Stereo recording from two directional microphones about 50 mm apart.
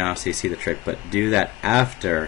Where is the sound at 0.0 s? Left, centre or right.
Centre.